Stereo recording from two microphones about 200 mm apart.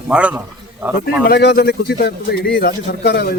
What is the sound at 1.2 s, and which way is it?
Speech, 55° left (ahead or behind).